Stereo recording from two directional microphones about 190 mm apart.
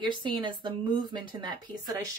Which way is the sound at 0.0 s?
25° right (ahead or behind).